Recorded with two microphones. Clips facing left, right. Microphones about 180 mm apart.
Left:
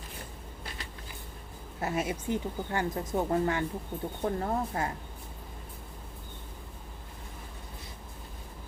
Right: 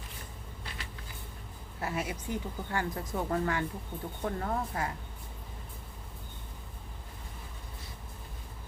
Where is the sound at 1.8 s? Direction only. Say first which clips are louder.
Left 4 dB; 25° left (ahead or behind).